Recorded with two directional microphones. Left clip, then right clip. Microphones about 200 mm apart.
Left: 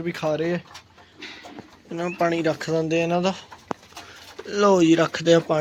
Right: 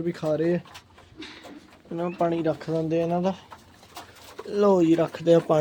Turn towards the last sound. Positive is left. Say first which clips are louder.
# left 2 dB
turn(degrees=-5)  # may be behind; listen again after turning